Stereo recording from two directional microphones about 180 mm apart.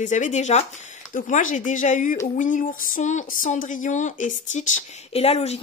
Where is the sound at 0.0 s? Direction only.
45° left (ahead or behind).